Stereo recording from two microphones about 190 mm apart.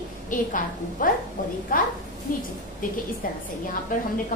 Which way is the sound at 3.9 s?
45° left (ahead or behind).